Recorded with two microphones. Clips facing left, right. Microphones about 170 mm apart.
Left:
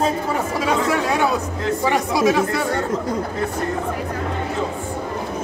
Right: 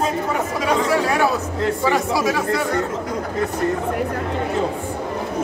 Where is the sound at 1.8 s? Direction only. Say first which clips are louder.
Left 3 dB; 20° left (ahead or behind).